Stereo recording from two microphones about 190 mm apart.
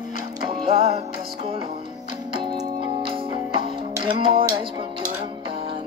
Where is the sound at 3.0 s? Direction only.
30° right (ahead or behind).